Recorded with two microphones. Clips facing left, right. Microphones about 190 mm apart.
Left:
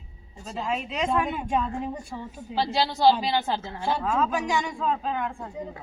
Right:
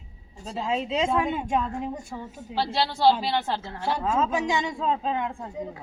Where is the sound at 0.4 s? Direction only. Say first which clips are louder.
Right 2 dB; 25° right (ahead or behind).